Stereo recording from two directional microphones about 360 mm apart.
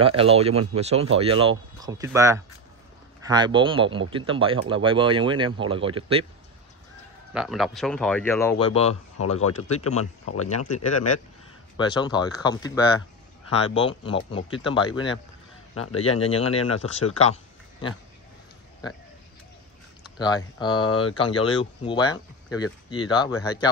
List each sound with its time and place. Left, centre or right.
0.0 s speech: centre
7.3 s speech: centre
9.2 s speech: left
11.7 s speech: centre
15.7 s speech: left
20.2 s speech: centre